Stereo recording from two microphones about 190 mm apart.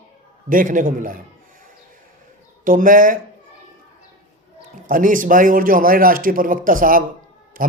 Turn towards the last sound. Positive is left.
turn(degrees=-50)  # may be behind; listen again after turning